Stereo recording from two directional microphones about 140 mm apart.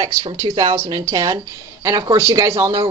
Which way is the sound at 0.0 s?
35° right (ahead or behind).